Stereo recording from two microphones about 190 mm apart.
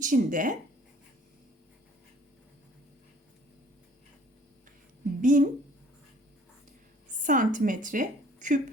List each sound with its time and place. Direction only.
0.0 s speech: 45° right (ahead or behind)
5.2 s speech: 45° right (ahead or behind)
7.2 s a woman's voice: 45° right (ahead or behind)